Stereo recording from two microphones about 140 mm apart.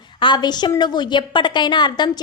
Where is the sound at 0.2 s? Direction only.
35° left (ahead or behind).